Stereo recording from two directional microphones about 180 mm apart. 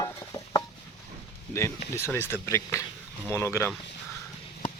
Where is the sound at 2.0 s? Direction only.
10° left (ahead or behind).